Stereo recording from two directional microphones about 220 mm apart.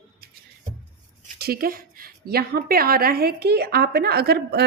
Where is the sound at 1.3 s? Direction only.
45° right (ahead or behind).